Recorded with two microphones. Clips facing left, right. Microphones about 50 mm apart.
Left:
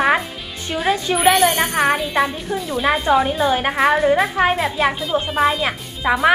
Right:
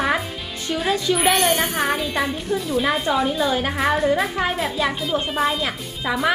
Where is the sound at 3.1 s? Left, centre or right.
Left.